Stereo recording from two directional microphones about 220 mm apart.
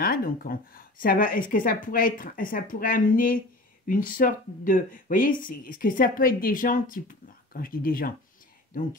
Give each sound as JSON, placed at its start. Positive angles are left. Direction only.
{"t": 0.0, "sound": "speech", "side_deg": 40}